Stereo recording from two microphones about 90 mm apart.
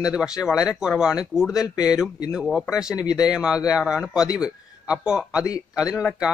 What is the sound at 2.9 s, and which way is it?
Speech, 45° left (ahead or behind).